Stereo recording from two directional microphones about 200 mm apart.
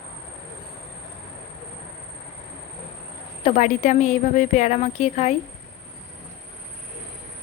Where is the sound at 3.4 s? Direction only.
35° left (ahead or behind).